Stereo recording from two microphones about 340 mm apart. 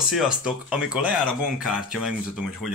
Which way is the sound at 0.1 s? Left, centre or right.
Centre.